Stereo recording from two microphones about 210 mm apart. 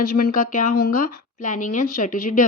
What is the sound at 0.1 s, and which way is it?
Speech, 40° left (ahead or behind).